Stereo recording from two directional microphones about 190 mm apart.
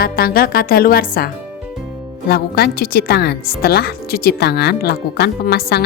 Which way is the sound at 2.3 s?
55° left (ahead or behind).